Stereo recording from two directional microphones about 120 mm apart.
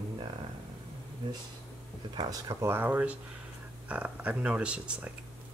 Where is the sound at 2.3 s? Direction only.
25° right (ahead or behind).